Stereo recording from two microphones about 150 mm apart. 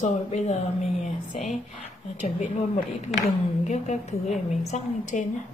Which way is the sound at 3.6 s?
50° left (ahead or behind).